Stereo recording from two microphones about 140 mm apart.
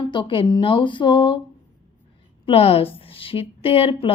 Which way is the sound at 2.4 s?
45° left (ahead or behind).